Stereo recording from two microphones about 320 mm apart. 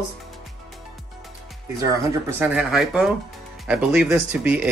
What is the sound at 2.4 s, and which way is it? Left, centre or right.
Speech, centre.